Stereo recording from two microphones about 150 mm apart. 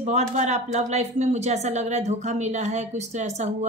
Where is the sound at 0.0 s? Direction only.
50° right (ahead or behind).